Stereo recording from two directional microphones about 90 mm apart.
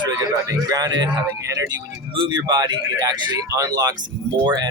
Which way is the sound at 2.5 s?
50° right (ahead or behind).